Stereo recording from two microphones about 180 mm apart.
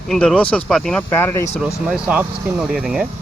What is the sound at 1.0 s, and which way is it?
Speech, 15° left (ahead or behind).